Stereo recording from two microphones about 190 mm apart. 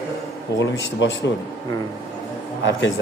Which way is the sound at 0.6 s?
75° left (ahead or behind).